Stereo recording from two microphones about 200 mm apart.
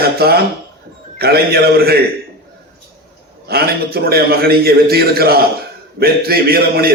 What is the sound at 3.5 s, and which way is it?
A man's voice, 50° right (ahead or behind).